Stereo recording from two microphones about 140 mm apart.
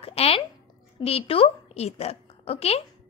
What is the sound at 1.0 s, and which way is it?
A woman's voice, 45° left (ahead or behind).